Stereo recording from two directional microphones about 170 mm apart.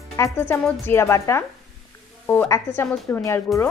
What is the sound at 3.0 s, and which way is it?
Speech, 15° left (ahead or behind).